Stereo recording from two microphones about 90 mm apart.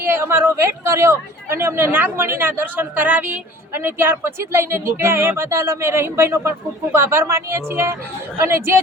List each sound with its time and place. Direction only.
0.0 s speech: 25° right (ahead or behind)